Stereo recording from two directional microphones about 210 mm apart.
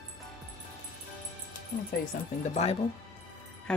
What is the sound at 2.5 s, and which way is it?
Speech, 30° left (ahead or behind).